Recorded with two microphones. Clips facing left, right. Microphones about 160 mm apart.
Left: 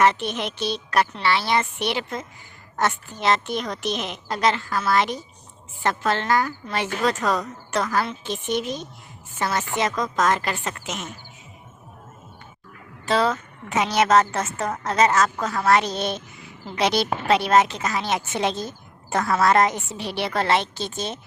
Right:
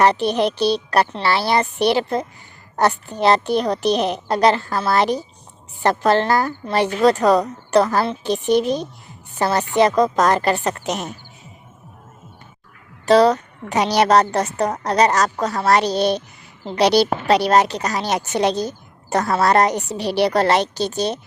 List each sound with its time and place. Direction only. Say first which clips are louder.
0.0 s a woman's voice: right 5 dB; 35° right (ahead or behind)
13.1 s a woman's voice: right 8 dB; 40° right (ahead or behind)